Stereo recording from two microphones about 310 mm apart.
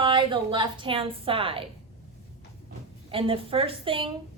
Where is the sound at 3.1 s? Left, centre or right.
Centre.